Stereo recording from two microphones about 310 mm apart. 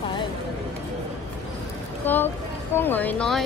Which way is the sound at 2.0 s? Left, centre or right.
Centre.